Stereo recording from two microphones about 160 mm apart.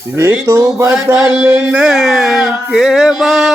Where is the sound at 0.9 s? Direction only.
5° right (ahead or behind).